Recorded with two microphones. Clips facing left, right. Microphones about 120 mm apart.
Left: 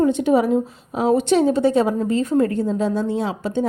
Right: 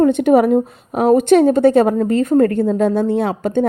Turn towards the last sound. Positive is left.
turn(degrees=-55)  # may be behind; listen again after turning